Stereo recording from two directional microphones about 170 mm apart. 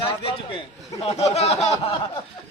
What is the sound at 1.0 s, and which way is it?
Speech, 40° left (ahead or behind).